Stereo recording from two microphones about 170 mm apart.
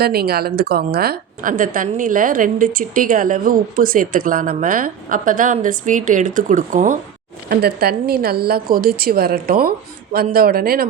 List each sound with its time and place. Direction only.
0.0 s a woman's voice: 65° right (ahead or behind); by 7.0 s 50° right (ahead or behind)
7.5 s a woman's voice: 65° right (ahead or behind)